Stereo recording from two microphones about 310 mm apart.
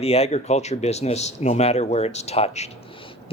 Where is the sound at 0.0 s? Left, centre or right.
Centre.